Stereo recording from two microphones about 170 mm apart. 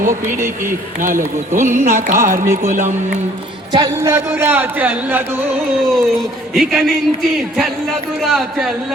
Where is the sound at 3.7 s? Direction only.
20° right (ahead or behind).